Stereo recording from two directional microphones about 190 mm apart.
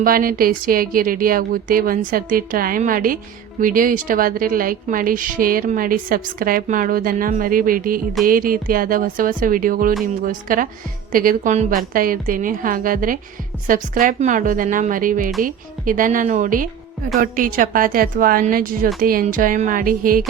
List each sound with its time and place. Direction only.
0.0 s a woman's voice: 50° right (ahead or behind)